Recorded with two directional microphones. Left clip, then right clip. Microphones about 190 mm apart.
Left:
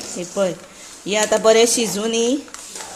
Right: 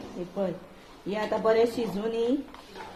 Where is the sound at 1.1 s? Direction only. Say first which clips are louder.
Left 11 dB; 55° left (ahead or behind).